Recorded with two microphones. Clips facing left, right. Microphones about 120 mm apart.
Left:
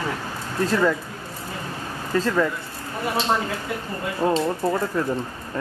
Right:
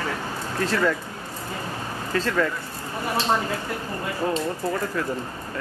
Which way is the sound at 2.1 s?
15° left (ahead or behind).